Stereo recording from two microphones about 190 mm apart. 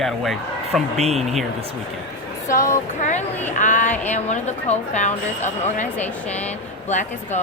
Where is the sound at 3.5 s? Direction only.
40° left (ahead or behind).